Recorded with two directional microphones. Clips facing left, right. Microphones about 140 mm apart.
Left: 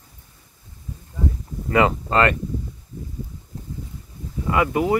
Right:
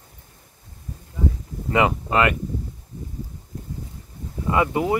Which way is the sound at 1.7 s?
15° right (ahead or behind).